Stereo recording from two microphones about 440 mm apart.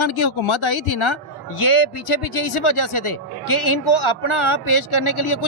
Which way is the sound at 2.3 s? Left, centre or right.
Left.